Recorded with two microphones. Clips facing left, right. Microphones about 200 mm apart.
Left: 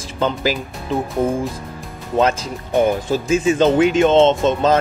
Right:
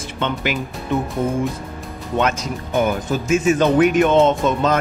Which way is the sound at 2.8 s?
30° left (ahead or behind).